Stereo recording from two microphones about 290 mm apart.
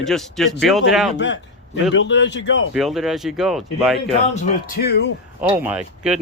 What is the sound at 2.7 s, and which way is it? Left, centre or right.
Speech, centre.